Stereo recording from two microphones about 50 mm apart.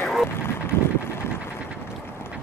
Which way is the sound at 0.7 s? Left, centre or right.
Left.